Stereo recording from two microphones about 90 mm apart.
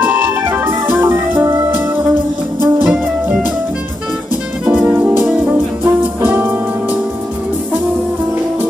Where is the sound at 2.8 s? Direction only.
5° right (ahead or behind).